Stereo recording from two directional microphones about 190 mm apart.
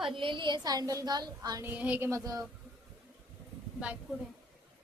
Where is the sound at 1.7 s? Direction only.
10° right (ahead or behind).